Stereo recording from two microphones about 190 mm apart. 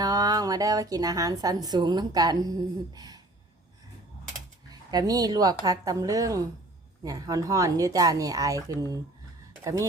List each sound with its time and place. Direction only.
0.0 s a woman's voice: 20° right (ahead or behind)
4.7 s a woman's voice: 20° right (ahead or behind)